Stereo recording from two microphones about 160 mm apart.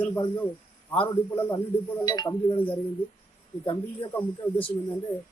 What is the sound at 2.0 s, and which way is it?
Speech, 25° left (ahead or behind).